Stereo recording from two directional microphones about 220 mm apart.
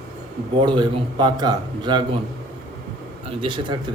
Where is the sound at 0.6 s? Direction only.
20° right (ahead or behind).